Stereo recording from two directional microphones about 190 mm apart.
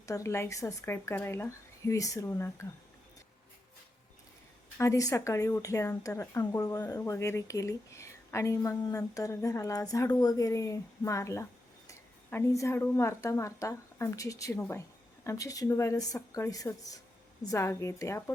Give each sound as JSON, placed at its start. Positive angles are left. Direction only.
{"t": 0.0, "sound": "speech", "side_deg": 15}
{"t": 4.8, "sound": "a woman's voice", "side_deg": 15}